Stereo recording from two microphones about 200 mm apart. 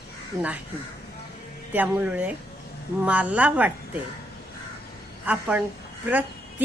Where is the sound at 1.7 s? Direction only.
10° right (ahead or behind).